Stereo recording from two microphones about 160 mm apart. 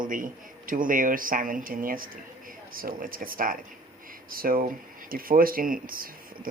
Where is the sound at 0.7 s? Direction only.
60° right (ahead or behind).